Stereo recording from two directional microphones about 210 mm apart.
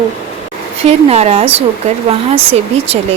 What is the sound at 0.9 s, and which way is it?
Speech, 30° right (ahead or behind).